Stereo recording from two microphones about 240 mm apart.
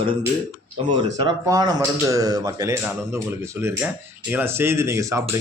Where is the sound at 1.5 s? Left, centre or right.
Centre.